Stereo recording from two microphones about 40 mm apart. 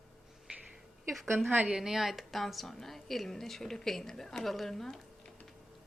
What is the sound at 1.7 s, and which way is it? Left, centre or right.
A woman's voice, centre.